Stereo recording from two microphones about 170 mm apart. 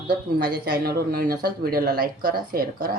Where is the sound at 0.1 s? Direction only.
60° right (ahead or behind).